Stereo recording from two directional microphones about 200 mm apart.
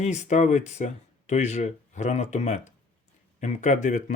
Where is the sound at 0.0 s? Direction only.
35° left (ahead or behind).